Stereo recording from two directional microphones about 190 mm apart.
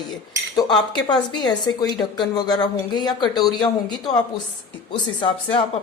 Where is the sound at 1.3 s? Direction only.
20° left (ahead or behind).